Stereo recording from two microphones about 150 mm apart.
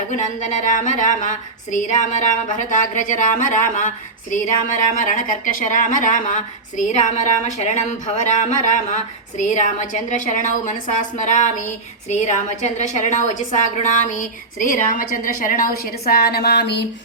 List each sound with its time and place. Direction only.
0.1 s a woman's voice: 55° left (ahead or behind); by 16.6 s 90° left